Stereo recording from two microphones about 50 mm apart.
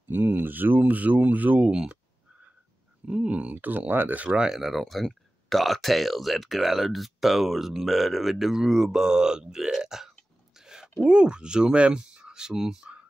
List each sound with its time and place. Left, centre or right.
0.1 s speech: right
1.7 s speech: centre
3.1 s speech: right
4.2 s speech: right
4.5 s speech: centre